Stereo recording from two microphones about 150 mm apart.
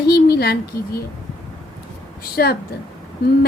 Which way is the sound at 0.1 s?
90° left.